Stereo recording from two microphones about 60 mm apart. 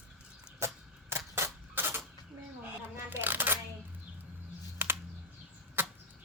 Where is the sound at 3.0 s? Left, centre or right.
Right.